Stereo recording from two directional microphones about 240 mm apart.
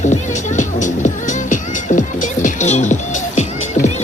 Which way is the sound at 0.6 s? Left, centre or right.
Left.